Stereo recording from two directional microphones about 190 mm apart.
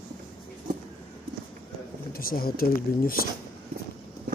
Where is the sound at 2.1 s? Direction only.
50° left (ahead or behind).